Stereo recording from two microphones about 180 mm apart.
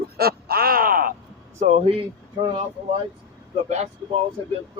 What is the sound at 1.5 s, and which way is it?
Speech, 40° right (ahead or behind).